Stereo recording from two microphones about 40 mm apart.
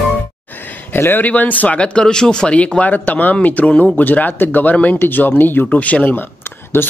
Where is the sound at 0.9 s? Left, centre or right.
Left.